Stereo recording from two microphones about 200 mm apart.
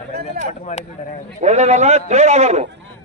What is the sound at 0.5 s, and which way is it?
Speech, 35° left (ahead or behind).